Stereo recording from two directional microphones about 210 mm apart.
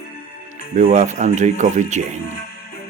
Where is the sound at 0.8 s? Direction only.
35° right (ahead or behind).